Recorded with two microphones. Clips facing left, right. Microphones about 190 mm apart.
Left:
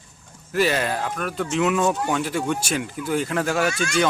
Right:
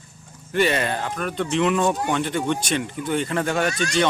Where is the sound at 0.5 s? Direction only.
Centre (ahead or behind).